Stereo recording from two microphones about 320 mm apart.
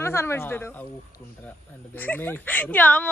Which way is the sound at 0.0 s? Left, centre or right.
Centre.